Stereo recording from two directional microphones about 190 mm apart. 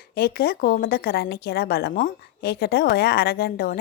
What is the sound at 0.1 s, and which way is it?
A woman's voice, 55° left (ahead or behind).